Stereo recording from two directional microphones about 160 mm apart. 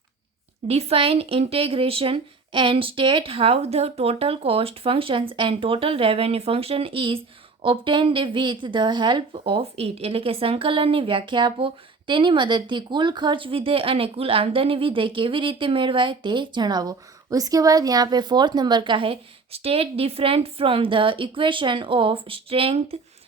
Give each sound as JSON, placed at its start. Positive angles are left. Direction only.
{"t": 0.7, "sound": "speech", "side_deg": -40}